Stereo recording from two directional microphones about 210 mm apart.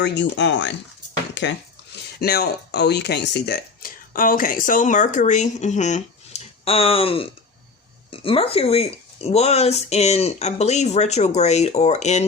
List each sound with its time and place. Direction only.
0.0 s speech: 55° left (ahead or behind)
2.1 s speech: 50° left (ahead or behind)
4.1 s speech: 40° left (ahead or behind)